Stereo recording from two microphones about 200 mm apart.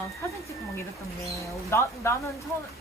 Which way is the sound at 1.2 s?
15° left (ahead or behind).